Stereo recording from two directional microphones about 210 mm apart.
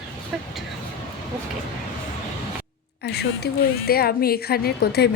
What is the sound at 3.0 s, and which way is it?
A woman's voice, 50° left (ahead or behind).